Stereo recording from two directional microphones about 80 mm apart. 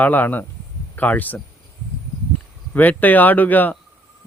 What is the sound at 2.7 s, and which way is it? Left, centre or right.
Speech, left.